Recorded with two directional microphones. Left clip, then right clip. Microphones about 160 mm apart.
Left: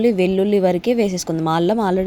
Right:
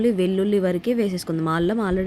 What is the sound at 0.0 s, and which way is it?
A woman's voice, 20° left (ahead or behind).